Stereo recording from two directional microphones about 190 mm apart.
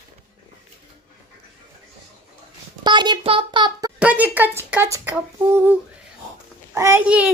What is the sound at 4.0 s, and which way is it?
A child's voice, 10° right (ahead or behind).